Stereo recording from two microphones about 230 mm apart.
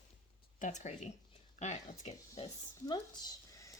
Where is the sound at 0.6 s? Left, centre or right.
Left.